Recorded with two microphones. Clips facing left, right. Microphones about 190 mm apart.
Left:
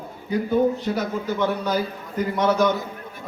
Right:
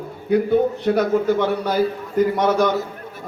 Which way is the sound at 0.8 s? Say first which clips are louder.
Right 8 dB; 60° right (ahead or behind).